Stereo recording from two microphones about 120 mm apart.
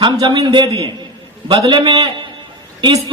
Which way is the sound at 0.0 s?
40° right (ahead or behind).